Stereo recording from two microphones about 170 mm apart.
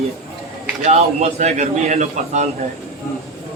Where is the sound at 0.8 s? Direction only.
45° right (ahead or behind).